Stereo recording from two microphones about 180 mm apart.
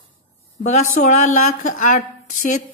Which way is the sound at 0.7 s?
40° left (ahead or behind).